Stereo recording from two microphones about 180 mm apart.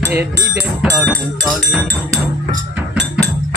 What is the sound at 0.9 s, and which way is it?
Music, 10° right (ahead or behind).